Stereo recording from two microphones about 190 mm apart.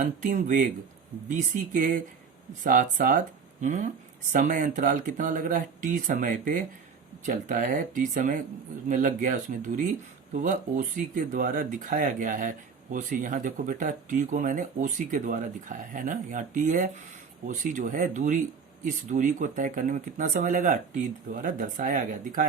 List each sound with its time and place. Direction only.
0.0 s speech: 40° right (ahead or behind)